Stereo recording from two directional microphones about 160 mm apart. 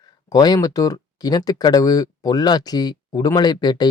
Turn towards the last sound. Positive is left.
turn(degrees=25)  # may be behind; listen again after turning